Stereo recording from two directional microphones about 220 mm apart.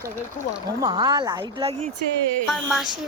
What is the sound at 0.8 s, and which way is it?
Speech, 15° right (ahead or behind).